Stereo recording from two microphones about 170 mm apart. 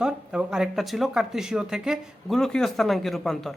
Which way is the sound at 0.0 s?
5° right (ahead or behind).